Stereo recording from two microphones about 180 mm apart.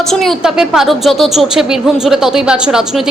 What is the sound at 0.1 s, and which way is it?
A woman's voice, centre (ahead or behind).